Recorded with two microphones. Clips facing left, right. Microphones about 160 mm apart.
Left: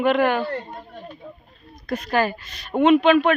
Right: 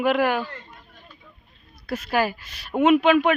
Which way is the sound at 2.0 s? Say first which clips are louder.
Left 1 dB; 10° right (ahead or behind).